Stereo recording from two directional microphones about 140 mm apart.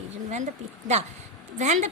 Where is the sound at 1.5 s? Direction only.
55° right (ahead or behind).